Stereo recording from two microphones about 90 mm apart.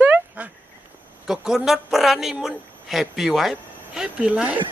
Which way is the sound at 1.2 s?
5° right (ahead or behind).